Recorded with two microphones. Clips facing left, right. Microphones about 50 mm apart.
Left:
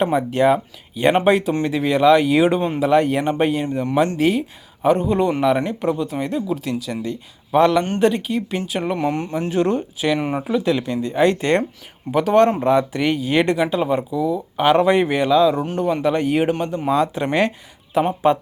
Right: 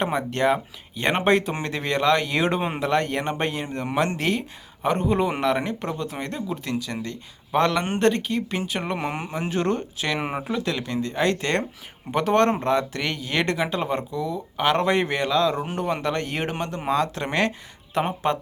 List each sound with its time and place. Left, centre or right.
0.0 s speech: centre
2.6 s speech: centre
2.8 s speech: centre
9.0 s speech: centre
9.5 s speech: centre
10.2 s speech: centre
10.6 s speech: centre
12.1 s speech: centre
13.6 s speech: centre
15.6 s speech: centre
16.9 s speech: centre